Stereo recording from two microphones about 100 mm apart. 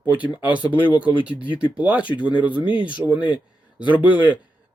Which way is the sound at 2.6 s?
60° left (ahead or behind).